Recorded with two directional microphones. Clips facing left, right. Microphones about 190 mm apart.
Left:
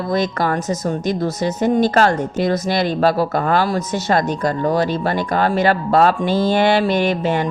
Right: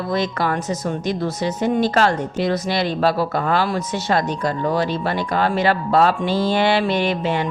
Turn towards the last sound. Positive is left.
turn(degrees=45)  # may be behind; listen again after turning